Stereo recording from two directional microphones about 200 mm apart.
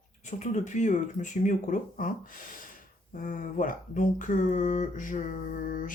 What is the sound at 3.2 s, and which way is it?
Speech, 40° left (ahead or behind).